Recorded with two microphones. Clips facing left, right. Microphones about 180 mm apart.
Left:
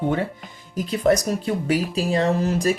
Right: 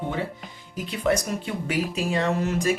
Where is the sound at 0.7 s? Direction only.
40° left (ahead or behind).